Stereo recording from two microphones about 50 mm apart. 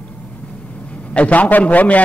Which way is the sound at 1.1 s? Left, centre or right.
Left.